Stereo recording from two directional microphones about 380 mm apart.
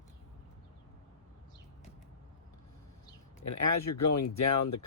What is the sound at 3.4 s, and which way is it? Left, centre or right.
Speech, left.